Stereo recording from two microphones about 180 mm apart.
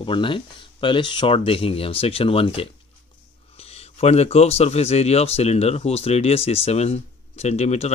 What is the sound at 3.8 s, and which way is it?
Speech, 35° left (ahead or behind).